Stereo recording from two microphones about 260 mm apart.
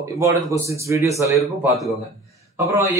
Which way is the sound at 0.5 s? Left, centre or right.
Centre.